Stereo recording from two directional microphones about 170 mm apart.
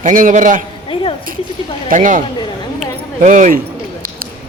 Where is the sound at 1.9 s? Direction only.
50° right (ahead or behind).